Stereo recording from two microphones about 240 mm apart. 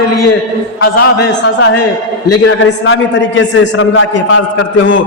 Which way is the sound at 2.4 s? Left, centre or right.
Left.